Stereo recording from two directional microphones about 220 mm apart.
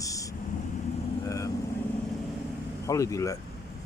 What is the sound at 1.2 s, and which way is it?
Vehicle, 15° left (ahead or behind).